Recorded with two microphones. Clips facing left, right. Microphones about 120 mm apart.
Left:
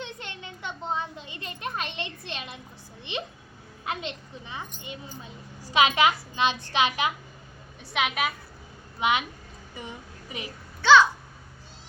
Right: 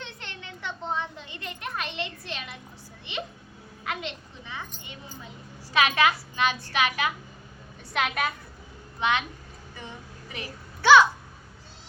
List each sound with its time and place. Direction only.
0.0 s a child's voice: 15° left (ahead or behind)
3.8 s a child's voice: 20° left (ahead or behind)
7.9 s a woman's voice: 5° left (ahead or behind)
9.0 s a woman's voice: 15° left (ahead or behind)
10.8 s a sound: 10° right (ahead or behind)